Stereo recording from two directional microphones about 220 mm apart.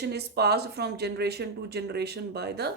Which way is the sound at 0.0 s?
50° right (ahead or behind).